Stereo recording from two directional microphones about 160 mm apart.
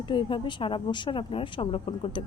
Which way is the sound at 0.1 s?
30° left (ahead or behind).